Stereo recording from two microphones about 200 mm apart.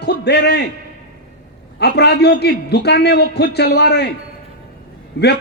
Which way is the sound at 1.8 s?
55° left (ahead or behind).